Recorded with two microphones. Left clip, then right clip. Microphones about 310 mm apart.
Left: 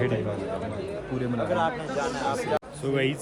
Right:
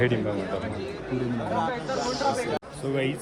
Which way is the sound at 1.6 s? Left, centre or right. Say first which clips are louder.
Left 1 dB; left.